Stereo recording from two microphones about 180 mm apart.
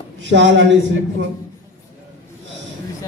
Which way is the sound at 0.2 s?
90° right.